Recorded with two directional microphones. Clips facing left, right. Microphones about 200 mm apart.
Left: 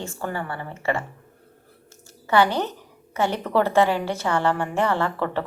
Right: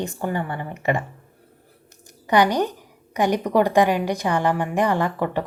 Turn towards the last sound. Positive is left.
turn(degrees=-15)  # may be behind; listen again after turning